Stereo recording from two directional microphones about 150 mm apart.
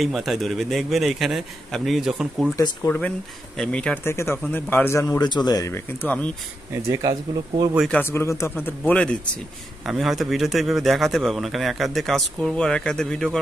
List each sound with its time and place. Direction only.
0.0 s a man's voice: centre (ahead or behind)
2.5 s speech: 20° left (ahead or behind)
3.5 s a man's voice: 5° left (ahead or behind); by 5.7 s 25° left (ahead or behind)
5.7 s a man's voice: 15° left (ahead or behind)
6.7 s speech: 20° right (ahead or behind)
7.9 s a man's voice: 15° left (ahead or behind)